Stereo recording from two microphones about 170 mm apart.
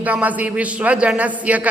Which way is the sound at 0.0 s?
10° right (ahead or behind).